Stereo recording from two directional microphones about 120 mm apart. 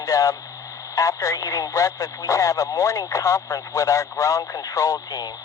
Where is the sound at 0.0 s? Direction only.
30° left (ahead or behind).